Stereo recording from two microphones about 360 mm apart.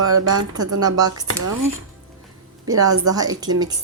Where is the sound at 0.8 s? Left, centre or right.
Centre.